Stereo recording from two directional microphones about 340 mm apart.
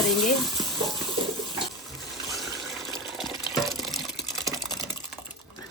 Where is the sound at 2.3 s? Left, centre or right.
Centre.